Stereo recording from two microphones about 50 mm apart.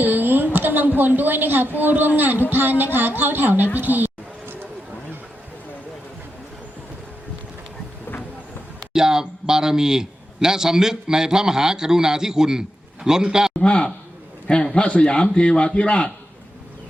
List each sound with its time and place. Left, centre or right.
0.0 s a woman's voice: right
3.8 s a sound: right
8.9 s a man's voice: centre
13.6 s a man's voice: centre